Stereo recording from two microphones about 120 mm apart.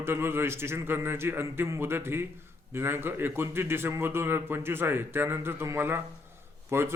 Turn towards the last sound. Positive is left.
turn(degrees=-20)  # may be behind; listen again after turning